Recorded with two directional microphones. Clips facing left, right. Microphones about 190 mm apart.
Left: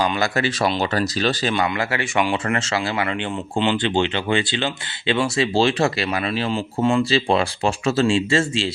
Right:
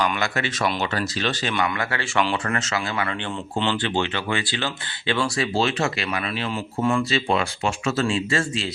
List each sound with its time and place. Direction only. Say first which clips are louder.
0.0 s speech: left 4 dB; 35° left (ahead or behind)